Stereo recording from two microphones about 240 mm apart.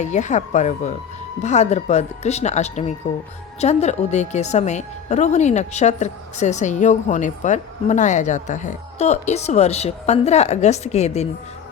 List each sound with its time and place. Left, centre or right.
0.0 s a woman's voice: left